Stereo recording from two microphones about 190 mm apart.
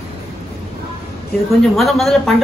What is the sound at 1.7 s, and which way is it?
Speech, centre (ahead or behind).